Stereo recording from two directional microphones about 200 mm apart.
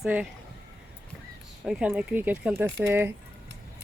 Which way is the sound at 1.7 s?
5° right (ahead or behind).